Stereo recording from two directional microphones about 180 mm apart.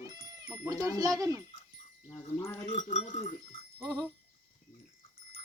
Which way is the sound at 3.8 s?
20° right (ahead or behind).